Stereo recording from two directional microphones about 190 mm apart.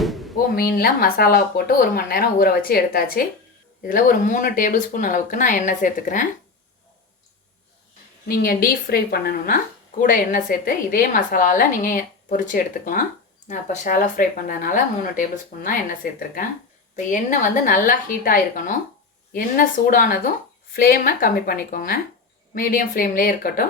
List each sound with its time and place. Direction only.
0.0 s a sound: centre (ahead or behind)
0.5 s a woman's voice: 50° left (ahead or behind)
8.3 s a woman's voice: 50° left (ahead or behind)